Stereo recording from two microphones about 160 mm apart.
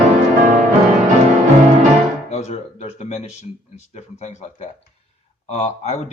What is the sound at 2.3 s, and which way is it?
Speech, 45° left (ahead or behind).